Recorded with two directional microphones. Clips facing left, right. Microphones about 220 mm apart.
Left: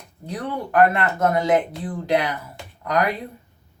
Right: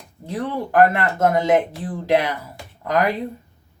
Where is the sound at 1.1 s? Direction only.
25° right (ahead or behind).